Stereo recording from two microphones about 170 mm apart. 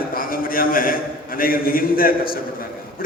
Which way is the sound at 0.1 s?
60° left (ahead or behind).